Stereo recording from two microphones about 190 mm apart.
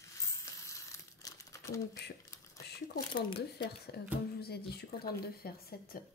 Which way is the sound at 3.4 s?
60° left (ahead or behind).